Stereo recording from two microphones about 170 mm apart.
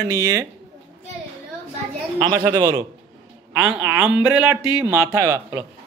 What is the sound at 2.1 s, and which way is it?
Speech, 25° right (ahead or behind).